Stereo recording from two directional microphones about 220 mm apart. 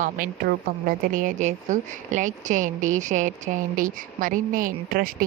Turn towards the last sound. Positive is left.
turn(degrees=-40)  # may be behind; listen again after turning